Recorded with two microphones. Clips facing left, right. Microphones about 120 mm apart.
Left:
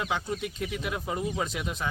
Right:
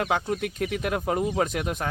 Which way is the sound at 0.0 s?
55° right (ahead or behind).